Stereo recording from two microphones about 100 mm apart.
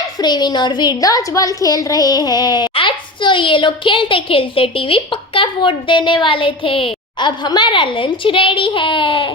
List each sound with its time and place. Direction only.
0.2 s a woman's voice: 45° left (ahead or behind)
2.7 s a woman's voice: 55° left (ahead or behind)